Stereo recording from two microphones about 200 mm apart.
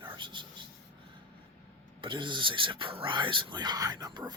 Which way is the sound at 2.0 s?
25° right (ahead or behind).